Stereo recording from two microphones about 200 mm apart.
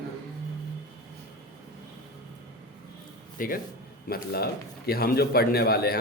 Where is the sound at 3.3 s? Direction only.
45° left (ahead or behind).